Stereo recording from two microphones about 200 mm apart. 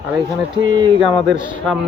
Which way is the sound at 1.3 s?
25° right (ahead or behind).